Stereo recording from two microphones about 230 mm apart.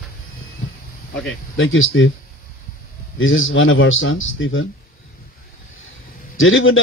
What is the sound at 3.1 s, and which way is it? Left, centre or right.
Speech, left.